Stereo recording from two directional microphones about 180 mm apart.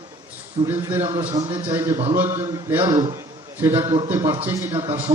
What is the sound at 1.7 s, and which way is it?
A man's voice, 15° right (ahead or behind).